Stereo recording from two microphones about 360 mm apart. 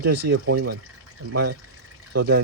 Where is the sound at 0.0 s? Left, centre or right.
Right.